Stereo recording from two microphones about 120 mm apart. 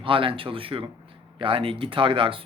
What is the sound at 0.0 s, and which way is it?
Speech, 45° right (ahead or behind).